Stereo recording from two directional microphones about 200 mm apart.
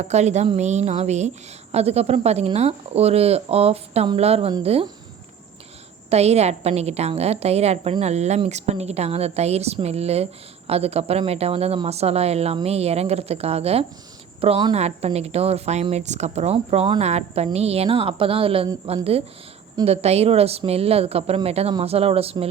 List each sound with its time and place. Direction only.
0.0 s speech: 35° right (ahead or behind)
6.1 s speech: 30° right (ahead or behind)